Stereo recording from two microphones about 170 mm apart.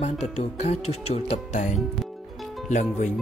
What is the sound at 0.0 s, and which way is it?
Speech, 40° left (ahead or behind).